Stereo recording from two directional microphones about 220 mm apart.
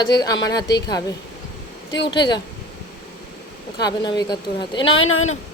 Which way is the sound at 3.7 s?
20° left (ahead or behind).